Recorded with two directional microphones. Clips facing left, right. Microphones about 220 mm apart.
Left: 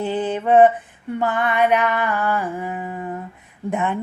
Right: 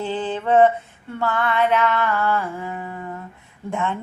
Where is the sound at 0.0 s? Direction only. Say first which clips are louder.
Left 3 dB; 20° left (ahead or behind).